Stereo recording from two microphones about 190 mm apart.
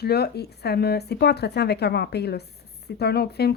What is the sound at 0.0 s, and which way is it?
A woman's voice, 55° left (ahead or behind).